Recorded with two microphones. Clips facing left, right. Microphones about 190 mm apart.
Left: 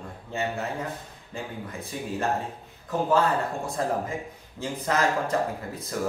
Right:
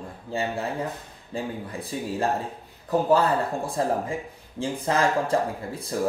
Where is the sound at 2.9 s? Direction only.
35° right (ahead or behind).